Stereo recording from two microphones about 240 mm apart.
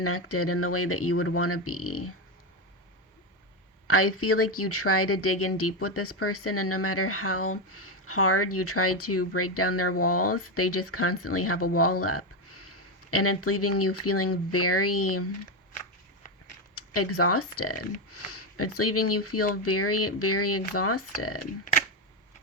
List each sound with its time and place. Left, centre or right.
0.0 s speech: left
3.8 s speech: left
16.7 s speech: left
21.6 s speech: left